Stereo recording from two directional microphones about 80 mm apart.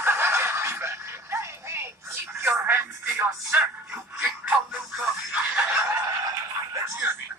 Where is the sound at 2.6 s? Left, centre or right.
Right.